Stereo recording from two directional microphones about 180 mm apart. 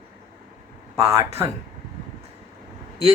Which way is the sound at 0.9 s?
15° right (ahead or behind).